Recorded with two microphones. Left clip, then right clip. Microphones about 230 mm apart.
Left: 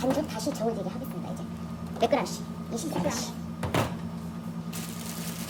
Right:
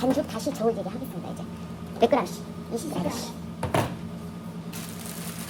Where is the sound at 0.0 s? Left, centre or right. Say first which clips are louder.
Right 2 dB; centre.